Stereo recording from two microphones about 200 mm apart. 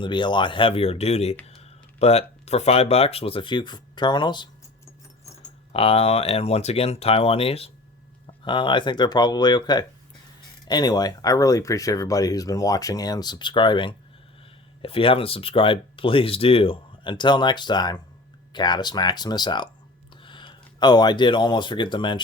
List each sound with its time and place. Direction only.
0.0 s speech: 25° left (ahead or behind)
4.9 s a sound: 15° left (ahead or behind)
5.7 s speech: 30° left (ahead or behind)